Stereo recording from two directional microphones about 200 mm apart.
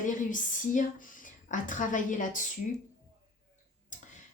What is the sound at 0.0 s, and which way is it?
Speech, 40° left (ahead or behind).